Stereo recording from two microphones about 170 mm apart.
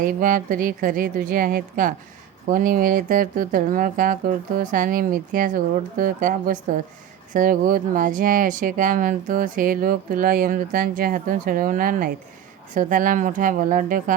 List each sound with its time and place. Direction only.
0.0 s speech: 50° right (ahead or behind)